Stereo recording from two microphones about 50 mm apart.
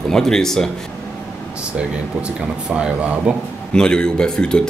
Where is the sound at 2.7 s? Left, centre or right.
Right.